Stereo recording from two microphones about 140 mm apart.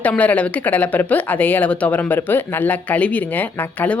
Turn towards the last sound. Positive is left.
turn(degrees=10)  # may be behind; listen again after turning